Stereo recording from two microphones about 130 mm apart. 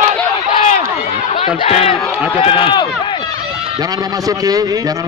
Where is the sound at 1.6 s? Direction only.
55° left (ahead or behind).